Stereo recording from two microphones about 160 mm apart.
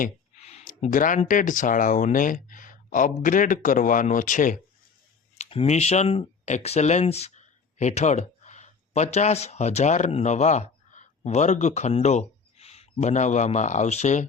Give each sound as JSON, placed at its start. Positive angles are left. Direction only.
{"t": 0.3, "sound": "a sound", "side_deg": 40}
{"t": 0.9, "sound": "speech", "side_deg": 55}
{"t": 5.4, "sound": "a man's voice", "side_deg": 40}